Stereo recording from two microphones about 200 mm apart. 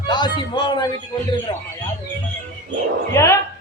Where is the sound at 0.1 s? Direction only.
20° left (ahead or behind).